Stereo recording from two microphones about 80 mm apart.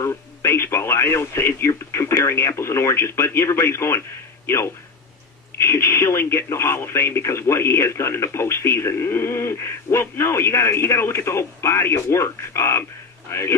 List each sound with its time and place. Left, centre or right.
0.0 s speech: left